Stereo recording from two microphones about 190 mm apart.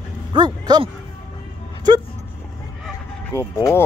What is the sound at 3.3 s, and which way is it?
Speech, 15° left (ahead or behind).